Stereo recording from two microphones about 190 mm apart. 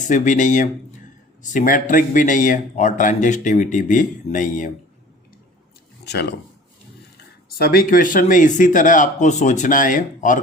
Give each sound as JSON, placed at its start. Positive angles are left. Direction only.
{"t": 0.1, "sound": "a man's voice", "side_deg": 40}
{"t": 6.1, "sound": "speech", "side_deg": 60}
{"t": 7.6, "sound": "speech", "side_deg": 50}